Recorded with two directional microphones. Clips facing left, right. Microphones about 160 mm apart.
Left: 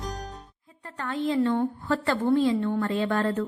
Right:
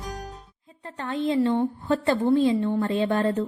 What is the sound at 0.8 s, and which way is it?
Speech, 20° right (ahead or behind).